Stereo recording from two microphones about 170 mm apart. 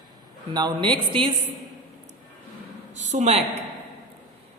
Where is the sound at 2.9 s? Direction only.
45° right (ahead or behind).